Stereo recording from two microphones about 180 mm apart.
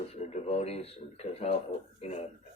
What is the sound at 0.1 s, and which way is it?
Speech, 35° left (ahead or behind).